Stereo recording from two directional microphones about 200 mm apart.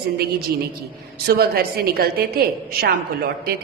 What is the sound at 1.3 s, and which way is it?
A woman's voice, 50° right (ahead or behind).